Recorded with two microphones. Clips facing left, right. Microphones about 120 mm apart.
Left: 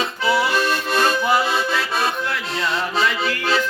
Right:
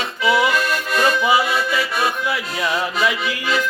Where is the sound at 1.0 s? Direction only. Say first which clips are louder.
Right 3 dB; 5° right (ahead or behind).